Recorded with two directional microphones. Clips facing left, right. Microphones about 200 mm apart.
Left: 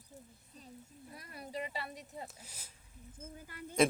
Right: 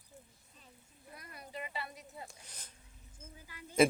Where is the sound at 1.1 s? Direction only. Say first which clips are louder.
Left 4 dB; 30° left (ahead or behind).